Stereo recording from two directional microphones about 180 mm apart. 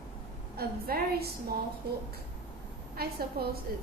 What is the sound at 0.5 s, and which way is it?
Speech, 60° right (ahead or behind).